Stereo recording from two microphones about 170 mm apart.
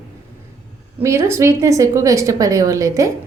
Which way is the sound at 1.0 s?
15° right (ahead or behind).